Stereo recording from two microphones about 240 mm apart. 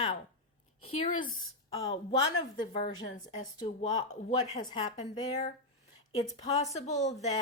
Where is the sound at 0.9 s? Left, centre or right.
Left.